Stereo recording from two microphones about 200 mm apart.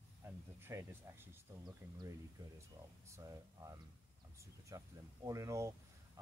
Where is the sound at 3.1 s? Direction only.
15° right (ahead or behind).